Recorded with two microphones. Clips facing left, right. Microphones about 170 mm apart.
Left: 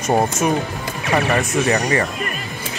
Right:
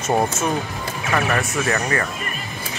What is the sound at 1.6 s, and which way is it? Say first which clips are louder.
Speech: left 4 dB; 20° left (ahead or behind).